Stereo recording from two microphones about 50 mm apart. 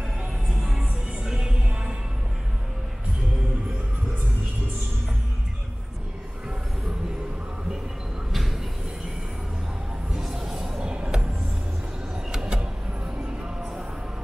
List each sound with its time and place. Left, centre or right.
0.2 s music: centre
8.3 s a sound: centre
10.1 s music: centre
12.3 s vehicle: centre